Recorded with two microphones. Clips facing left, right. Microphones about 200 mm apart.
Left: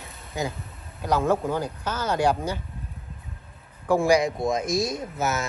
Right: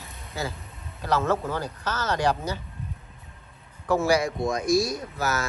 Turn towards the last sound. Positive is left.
turn(degrees=20)  # may be behind; listen again after turning